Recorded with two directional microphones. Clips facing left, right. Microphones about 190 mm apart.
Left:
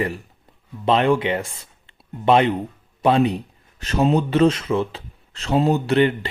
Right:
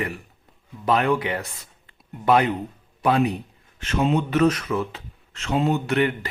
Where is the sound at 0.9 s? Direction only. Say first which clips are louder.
Left 3 dB; 25° left (ahead or behind).